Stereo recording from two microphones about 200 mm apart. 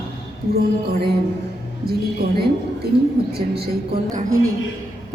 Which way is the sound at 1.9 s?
50° right (ahead or behind).